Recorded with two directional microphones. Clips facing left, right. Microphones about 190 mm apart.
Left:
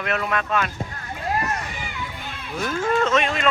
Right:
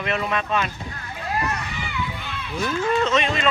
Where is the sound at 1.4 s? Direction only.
45° left (ahead or behind).